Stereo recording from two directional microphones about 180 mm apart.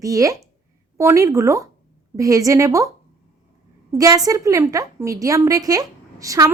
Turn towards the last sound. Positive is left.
turn(degrees=-20)  # may be behind; listen again after turning